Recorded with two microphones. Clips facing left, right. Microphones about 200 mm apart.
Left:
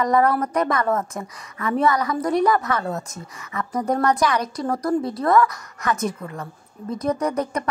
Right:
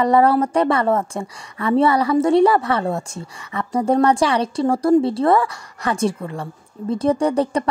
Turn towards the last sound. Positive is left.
turn(degrees=-30)  # may be behind; listen again after turning